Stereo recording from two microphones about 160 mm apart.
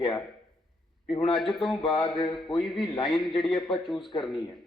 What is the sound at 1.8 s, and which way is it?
Speech, 30° left (ahead or behind).